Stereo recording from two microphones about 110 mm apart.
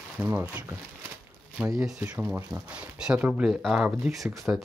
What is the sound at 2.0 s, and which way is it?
Speech, 15° right (ahead or behind).